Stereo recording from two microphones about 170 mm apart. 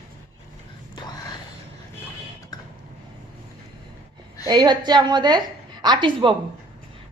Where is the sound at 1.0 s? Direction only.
25° left (ahead or behind).